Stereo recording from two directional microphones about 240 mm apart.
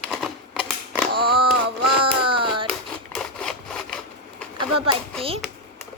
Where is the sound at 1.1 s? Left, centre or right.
Right.